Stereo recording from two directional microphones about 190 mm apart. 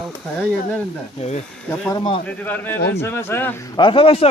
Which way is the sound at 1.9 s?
30° left (ahead or behind).